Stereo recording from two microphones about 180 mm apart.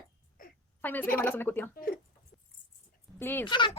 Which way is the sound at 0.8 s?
10° left (ahead or behind).